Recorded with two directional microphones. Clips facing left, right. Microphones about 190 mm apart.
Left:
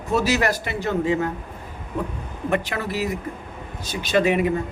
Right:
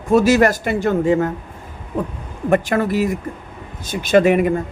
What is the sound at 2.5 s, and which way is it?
A man's voice, 50° right (ahead or behind).